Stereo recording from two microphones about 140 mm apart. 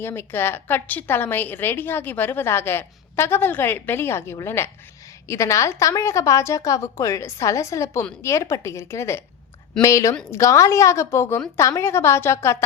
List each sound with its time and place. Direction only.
0.0 s a woman's voice: 15° left (ahead or behind)